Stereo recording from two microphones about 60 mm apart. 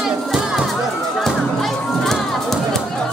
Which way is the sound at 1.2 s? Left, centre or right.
Centre.